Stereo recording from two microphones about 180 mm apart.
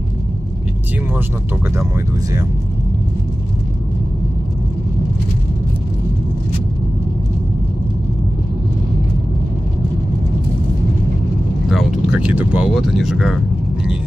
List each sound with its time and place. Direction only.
1.8 s speech: 15° right (ahead or behind)
11.7 s speech: 5° right (ahead or behind)